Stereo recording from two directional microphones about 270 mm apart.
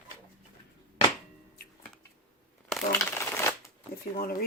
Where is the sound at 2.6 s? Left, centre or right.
Centre.